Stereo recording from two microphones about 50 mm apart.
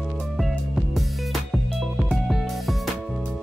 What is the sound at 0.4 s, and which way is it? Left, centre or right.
Music, centre.